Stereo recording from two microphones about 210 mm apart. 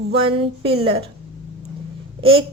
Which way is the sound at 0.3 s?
25° right (ahead or behind).